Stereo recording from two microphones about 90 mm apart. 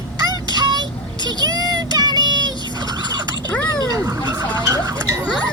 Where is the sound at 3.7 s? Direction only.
40° right (ahead or behind).